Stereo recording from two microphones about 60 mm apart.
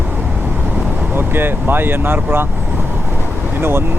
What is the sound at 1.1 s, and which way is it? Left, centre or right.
Speech, right.